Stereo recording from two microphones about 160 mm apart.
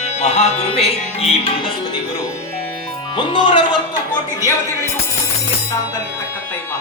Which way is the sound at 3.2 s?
30° left (ahead or behind).